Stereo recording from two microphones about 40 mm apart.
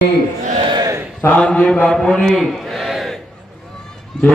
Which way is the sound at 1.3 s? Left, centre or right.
Centre.